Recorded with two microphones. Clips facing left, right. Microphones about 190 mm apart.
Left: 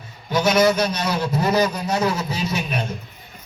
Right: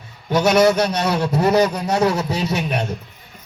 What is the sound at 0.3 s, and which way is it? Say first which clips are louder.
A man's voice: right 3 dB; 60° right (ahead or behind).